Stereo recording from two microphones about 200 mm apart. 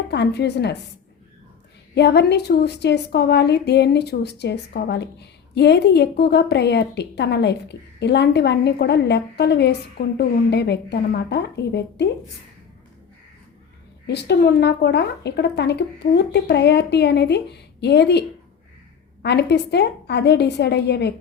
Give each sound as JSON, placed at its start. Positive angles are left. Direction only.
{"t": 0.1, "sound": "a woman's voice", "side_deg": 55}
{"t": 2.0, "sound": "a woman's voice", "side_deg": 55}
{"t": 14.1, "sound": "a woman's voice", "side_deg": 55}